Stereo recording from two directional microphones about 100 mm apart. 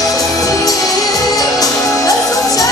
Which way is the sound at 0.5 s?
35° left (ahead or behind).